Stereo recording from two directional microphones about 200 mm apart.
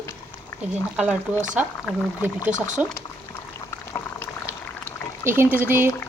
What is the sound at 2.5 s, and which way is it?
Speech, 40° right (ahead or behind).